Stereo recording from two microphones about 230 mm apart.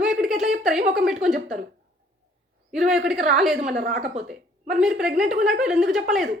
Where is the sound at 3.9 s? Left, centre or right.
Right.